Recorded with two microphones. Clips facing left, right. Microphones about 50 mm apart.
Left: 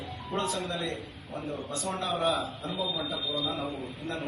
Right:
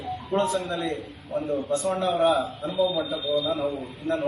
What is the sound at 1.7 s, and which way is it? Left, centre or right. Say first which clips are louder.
Speech: right 9 dB; right.